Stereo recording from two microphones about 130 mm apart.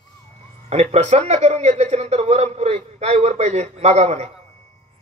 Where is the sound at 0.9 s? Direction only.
60° right (ahead or behind).